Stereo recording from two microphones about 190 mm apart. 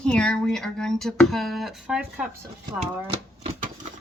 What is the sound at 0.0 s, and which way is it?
Speech, 5° left (ahead or behind).